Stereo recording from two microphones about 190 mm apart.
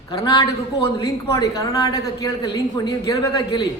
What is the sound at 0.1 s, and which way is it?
Speech, 20° left (ahead or behind).